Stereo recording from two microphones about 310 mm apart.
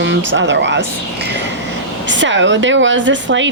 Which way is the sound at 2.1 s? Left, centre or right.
Right.